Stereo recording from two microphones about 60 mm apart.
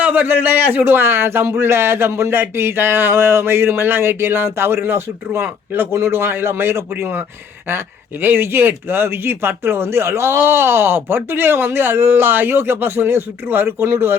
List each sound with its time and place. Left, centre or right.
0.0 s a man's voice: right